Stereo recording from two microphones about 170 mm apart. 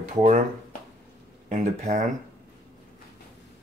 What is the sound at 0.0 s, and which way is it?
Speech, 45° right (ahead or behind).